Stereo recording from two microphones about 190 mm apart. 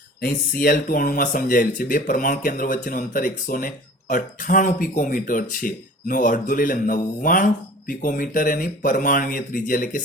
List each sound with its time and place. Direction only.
0.2 s speech: 50° left (ahead or behind)